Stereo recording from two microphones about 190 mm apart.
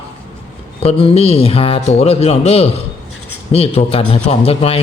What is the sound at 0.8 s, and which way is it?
A man's voice, 30° left (ahead or behind).